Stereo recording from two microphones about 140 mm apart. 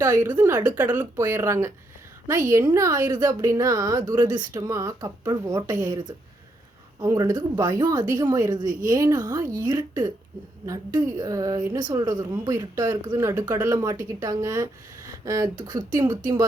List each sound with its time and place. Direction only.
0.0 s a woman's voice: 25° right (ahead or behind)
0.3 s a woman's voice: 10° right (ahead or behind); by 5.7 s 30° right (ahead or behind)
7.0 s a woman's voice: 25° right (ahead or behind)